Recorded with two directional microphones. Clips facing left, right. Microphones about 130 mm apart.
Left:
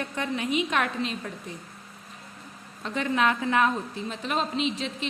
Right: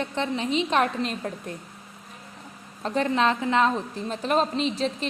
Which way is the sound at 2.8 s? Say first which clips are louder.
Right 2 dB; 35° right (ahead or behind).